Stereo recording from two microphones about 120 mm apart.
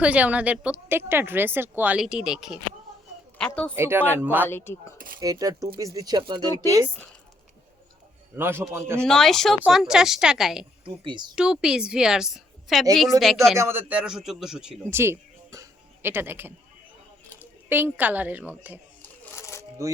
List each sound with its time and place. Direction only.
0.0 s a woman's voice: 10° right (ahead or behind)
3.3 s speech: 10° left (ahead or behind)
3.8 s a woman's voice: 20° right (ahead or behind)
4.4 s speech: 20° left (ahead or behind)
5.2 s speech: 30° right (ahead or behind)
6.7 s speech: 25° right (ahead or behind)
8.4 s speech: 20° right (ahead or behind)
9.0 s a woman's voice: 5° left (ahead or behind)
10.8 s speech: 40° right (ahead or behind)
11.3 s a woman's voice: 5° right (ahead or behind)
13.6 s a woman's voice: 20° right (ahead or behind)
14.8 s speech: 20° right (ahead or behind)
17.7 s a woman's voice: 15° right (ahead or behind)
19.4 s shuffling cards: 25° left (ahead or behind)